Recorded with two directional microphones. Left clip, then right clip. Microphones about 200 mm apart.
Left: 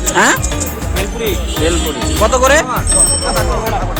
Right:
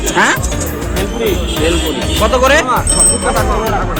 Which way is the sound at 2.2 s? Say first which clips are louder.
Even; 35° left (ahead or behind).